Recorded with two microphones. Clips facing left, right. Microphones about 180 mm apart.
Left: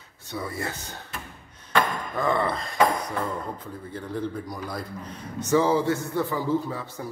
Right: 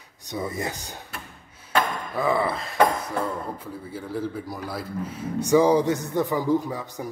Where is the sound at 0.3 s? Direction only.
20° right (ahead or behind).